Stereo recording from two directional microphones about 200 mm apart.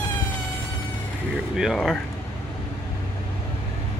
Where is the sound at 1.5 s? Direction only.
Centre (ahead or behind).